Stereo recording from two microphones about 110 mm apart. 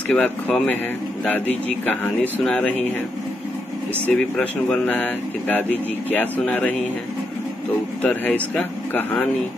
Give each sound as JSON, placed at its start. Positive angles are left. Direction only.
{"t": 0.1, "sound": "speech", "side_deg": 15}
{"t": 2.4, "sound": "speech", "side_deg": 10}
{"t": 4.1, "sound": "speech", "side_deg": 10}
{"t": 8.0, "sound": "speech", "side_deg": 15}